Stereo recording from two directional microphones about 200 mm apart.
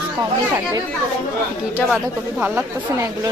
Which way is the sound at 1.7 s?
5° right (ahead or behind).